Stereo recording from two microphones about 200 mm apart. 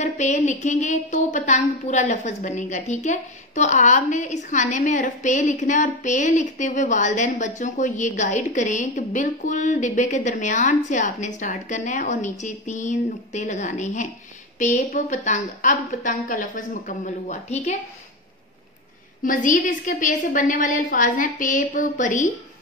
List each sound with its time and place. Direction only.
0.0 s a woman's voice: 35° left (ahead or behind)
19.2 s a woman's voice: 40° left (ahead or behind)